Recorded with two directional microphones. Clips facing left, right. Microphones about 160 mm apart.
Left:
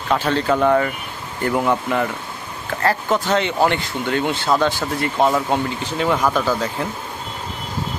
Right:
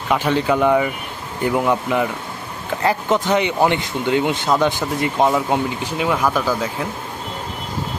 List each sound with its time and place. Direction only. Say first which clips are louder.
0.1 s speech: right 1 dB; 15° right (ahead or behind)